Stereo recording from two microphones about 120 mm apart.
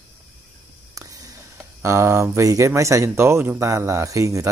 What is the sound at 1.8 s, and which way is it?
Speech, 25° right (ahead or behind).